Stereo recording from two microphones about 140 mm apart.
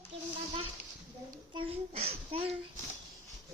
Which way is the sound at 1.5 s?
40° right (ahead or behind).